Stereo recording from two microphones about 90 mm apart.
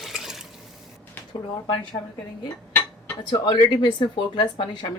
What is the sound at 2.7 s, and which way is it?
Dishes, 25° left (ahead or behind).